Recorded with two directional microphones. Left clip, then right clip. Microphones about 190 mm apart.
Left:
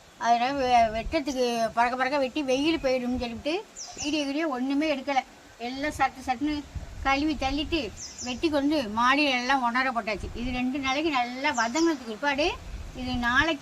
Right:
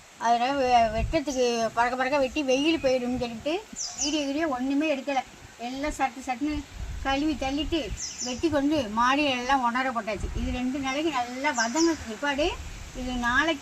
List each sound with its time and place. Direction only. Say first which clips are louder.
0.3 s speech: even; 30° right (ahead or behind)